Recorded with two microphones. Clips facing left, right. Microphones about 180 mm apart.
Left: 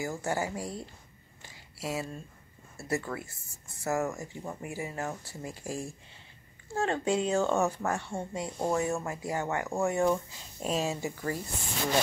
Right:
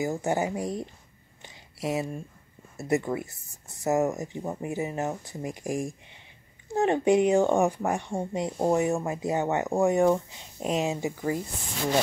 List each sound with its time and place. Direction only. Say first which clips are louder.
0.0 s speech: right 5 dB; 20° right (ahead or behind)
1.4 s a sound: right 6 dB; 20° right (ahead or behind)
2.8 s speech: right 6 dB; 20° right (ahead or behind)